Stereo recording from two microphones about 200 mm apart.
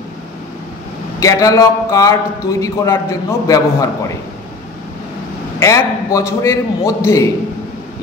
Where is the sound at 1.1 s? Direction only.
15° left (ahead or behind).